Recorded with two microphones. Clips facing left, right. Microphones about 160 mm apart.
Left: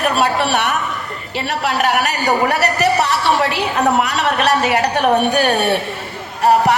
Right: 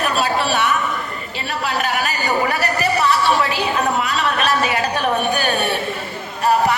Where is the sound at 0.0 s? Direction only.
65° left (ahead or behind).